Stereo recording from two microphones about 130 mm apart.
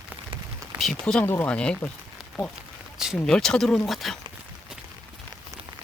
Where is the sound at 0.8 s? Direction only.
5° left (ahead or behind).